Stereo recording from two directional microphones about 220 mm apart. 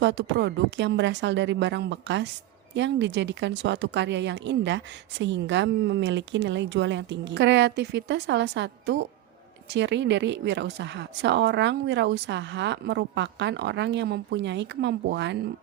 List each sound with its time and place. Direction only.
0.0 s a woman's voice: 55° right (ahead or behind)